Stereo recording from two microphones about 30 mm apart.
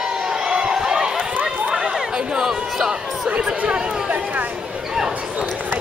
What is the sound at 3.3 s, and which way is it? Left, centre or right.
Speech, right.